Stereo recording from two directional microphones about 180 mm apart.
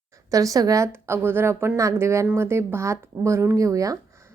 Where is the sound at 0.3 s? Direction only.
20° right (ahead or behind).